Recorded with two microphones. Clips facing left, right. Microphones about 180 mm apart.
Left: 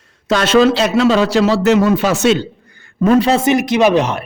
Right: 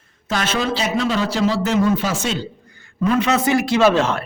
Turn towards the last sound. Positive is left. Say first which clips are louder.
# left 3 dB
turn(degrees=15)  # may be behind; listen again after turning